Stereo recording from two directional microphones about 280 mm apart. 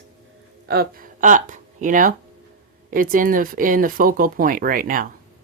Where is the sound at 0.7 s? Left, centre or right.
Right.